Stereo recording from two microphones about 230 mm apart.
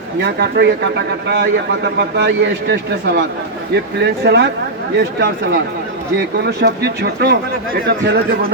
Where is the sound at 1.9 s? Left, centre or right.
Right.